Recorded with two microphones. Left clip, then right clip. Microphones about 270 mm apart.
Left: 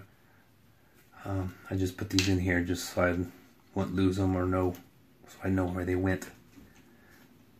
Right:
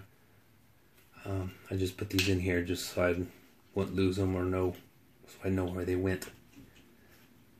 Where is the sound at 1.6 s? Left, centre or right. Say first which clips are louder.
Even; left.